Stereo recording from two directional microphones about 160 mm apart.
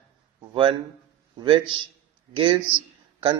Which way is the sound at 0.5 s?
30° right (ahead or behind).